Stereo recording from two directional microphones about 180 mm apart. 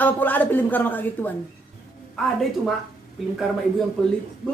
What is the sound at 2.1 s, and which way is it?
A woman's voice, centre (ahead or behind).